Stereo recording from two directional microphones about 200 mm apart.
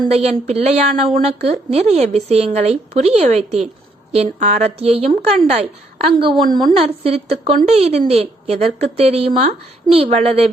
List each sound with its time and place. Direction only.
0.0 s a woman's voice: 30° right (ahead or behind)